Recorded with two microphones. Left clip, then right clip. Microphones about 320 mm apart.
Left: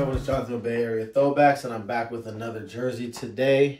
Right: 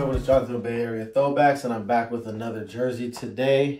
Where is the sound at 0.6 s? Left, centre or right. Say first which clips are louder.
Left 2 dB; centre.